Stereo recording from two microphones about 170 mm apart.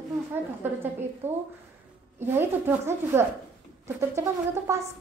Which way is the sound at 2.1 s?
10° right (ahead or behind).